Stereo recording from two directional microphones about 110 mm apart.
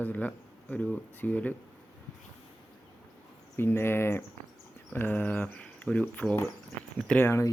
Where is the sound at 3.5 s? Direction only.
20° left (ahead or behind).